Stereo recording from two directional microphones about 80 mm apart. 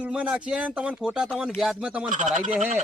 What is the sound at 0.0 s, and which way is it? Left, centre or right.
Speech, centre.